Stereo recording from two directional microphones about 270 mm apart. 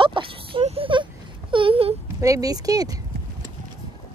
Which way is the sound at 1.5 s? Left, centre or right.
Centre.